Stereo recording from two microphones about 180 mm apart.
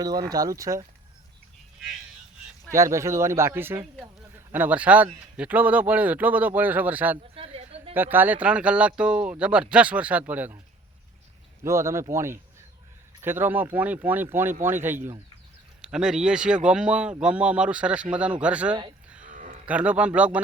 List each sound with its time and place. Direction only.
0.0 s speech: 20° right (ahead or behind)
2.7 s a man's voice: 15° right (ahead or behind)
7.3 s a sound: 35° right (ahead or behind)
7.9 s speech: 10° right (ahead or behind)
11.6 s speech: 15° right (ahead or behind)
19.2 s a sound: 45° right (ahead or behind)
19.6 s speech: 5° right (ahead or behind)